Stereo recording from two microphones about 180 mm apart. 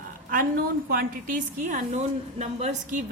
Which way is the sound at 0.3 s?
50° right (ahead or behind).